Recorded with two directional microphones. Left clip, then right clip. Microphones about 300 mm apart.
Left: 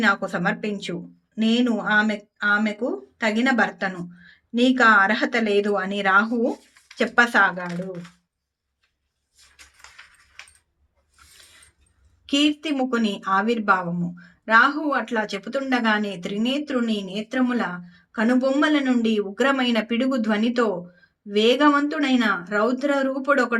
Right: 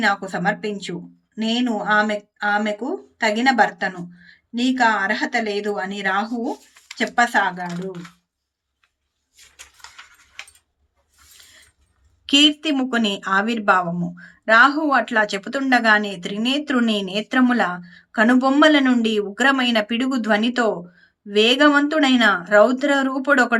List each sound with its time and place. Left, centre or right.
0.0 s speech: centre
12.2 s speech: centre